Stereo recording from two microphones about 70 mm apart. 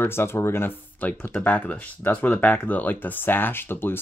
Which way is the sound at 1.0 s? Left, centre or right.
Left.